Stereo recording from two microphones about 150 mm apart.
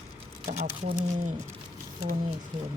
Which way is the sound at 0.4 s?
50° right (ahead or behind).